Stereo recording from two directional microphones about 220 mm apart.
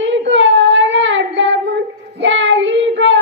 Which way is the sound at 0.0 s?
55° right (ahead or behind).